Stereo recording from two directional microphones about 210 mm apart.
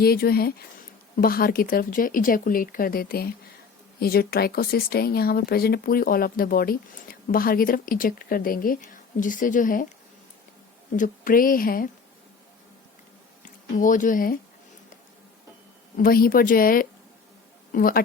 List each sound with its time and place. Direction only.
0.0 s speech: 45° left (ahead or behind)
10.9 s speech: 40° left (ahead or behind)
13.4 s speech: 40° left (ahead or behind)
16.0 s speech: 45° left (ahead or behind)